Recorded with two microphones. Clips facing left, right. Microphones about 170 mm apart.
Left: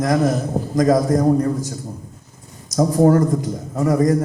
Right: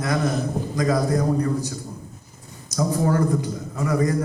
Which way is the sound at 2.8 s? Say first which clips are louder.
Left 7 dB; 45° left (ahead or behind).